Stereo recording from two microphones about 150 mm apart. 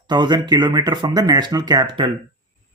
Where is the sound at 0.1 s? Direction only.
30° right (ahead or behind).